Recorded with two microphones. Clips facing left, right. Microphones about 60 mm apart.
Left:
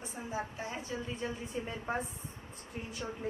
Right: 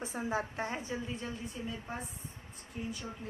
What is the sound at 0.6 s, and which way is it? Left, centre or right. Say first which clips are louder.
Speech: right 4 dB; right.